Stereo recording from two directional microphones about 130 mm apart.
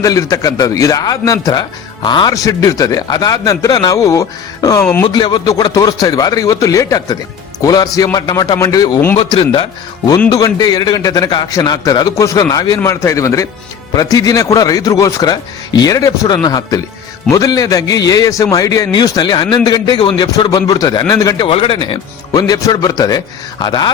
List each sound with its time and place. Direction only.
0.0 s a man's voice: 25° left (ahead or behind)
5.0 s a man's voice: 35° left (ahead or behind)
9.1 s speech: 45° left (ahead or behind)
10.2 s a man's voice: 30° left (ahead or behind)
21.4 s speech: 45° left (ahead or behind)
22.3 s a man's voice: 30° left (ahead or behind)